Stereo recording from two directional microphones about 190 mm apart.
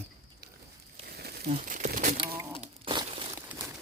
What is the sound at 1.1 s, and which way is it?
Crumpling, 55° right (ahead or behind).